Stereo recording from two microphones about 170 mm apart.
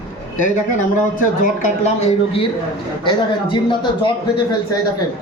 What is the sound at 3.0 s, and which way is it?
A man's voice, 30° left (ahead or behind).